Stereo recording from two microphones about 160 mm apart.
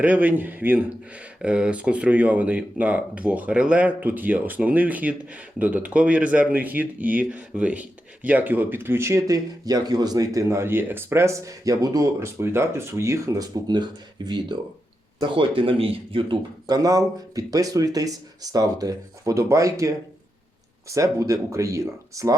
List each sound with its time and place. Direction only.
0.0 s speech: 10° right (ahead or behind)
20.9 s speech: 20° right (ahead or behind)